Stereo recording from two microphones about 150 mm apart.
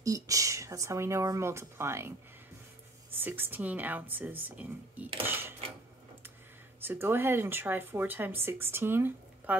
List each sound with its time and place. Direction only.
0.0 s speech: 20° right (ahead or behind)
6.8 s speech: 15° right (ahead or behind)